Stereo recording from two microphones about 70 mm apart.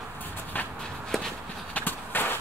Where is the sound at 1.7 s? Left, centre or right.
Left.